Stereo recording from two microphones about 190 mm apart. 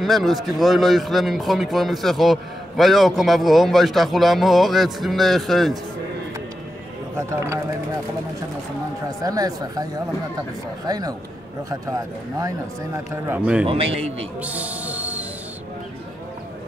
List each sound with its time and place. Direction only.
0.0 s a man's voice: centre (ahead or behind)
7.2 s a man's voice: 15° right (ahead or behind)
9.2 s a man's voice: 20° right (ahead or behind)
13.7 s a man's voice: 30° right (ahead or behind)
14.4 s music: 5° right (ahead or behind)